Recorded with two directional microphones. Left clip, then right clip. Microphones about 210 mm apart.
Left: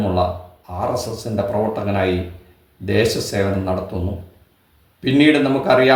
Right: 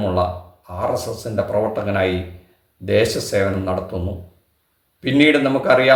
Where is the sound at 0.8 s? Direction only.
5° right (ahead or behind).